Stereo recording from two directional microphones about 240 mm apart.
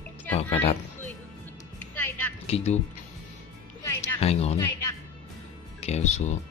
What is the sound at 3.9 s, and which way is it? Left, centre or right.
Music, left.